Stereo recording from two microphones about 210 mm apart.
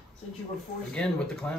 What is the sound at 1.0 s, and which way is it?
Speech, 5° left (ahead or behind).